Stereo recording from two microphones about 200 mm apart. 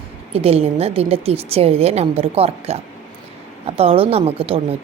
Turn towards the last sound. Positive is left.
turn(degrees=-30)  # may be behind; listen again after turning